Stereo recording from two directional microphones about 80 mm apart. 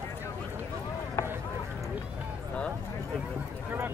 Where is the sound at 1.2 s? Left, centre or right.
Left.